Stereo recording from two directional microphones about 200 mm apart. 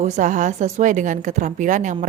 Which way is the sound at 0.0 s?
35° right (ahead or behind).